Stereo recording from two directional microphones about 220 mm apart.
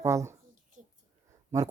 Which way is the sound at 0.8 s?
35° right (ahead or behind).